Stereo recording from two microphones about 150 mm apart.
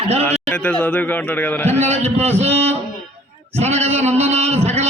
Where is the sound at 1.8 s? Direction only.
45° right (ahead or behind).